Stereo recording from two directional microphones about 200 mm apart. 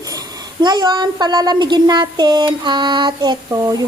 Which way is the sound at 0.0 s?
15° right (ahead or behind).